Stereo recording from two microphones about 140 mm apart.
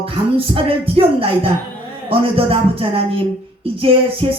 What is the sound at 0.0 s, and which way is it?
Music, 40° right (ahead or behind).